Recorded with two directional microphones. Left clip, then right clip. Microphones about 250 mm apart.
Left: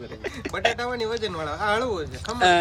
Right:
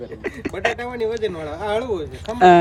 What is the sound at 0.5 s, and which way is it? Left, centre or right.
Speech, left.